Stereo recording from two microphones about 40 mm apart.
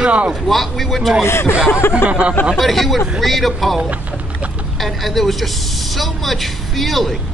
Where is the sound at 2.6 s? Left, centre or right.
Centre.